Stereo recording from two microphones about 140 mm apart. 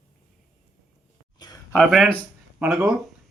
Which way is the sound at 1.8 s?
5° right (ahead or behind).